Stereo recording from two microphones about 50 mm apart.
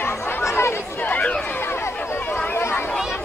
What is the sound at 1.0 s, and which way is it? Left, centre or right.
Chatter, left.